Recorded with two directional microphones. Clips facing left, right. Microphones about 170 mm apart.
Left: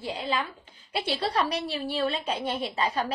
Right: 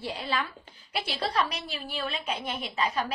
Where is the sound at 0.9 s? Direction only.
30° left (ahead or behind).